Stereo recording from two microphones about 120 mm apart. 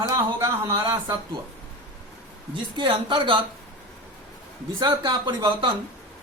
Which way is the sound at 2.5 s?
40° right (ahead or behind).